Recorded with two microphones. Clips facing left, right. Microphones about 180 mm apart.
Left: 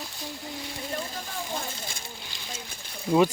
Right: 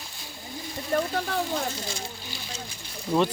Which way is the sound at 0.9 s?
55° right (ahead or behind).